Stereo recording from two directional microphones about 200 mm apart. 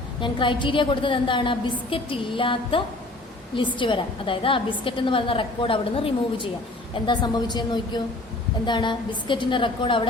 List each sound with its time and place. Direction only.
0.2 s a woman's voice: 25° left (ahead or behind)